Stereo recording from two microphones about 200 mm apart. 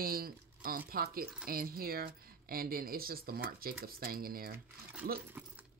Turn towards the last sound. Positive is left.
turn(degrees=-45)  # may be behind; listen again after turning